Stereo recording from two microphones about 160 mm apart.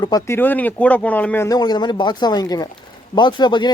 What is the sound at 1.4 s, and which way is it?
Speech, 25° left (ahead or behind).